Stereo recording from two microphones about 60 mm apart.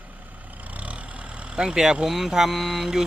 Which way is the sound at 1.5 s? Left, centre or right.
Centre.